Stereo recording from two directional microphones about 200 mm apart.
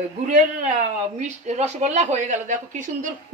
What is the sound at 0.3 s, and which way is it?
Speech, 40° right (ahead or behind).